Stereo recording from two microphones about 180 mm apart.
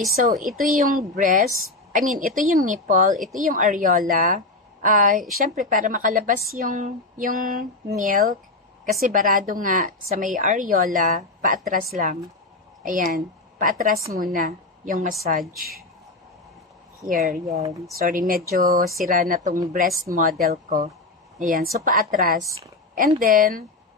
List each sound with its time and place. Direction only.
0.1 s a woman's voice: 50° right (ahead or behind)
17.1 s a woman's voice: 50° right (ahead or behind)